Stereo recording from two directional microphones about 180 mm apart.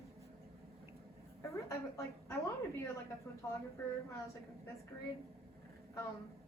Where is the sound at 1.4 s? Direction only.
15° left (ahead or behind).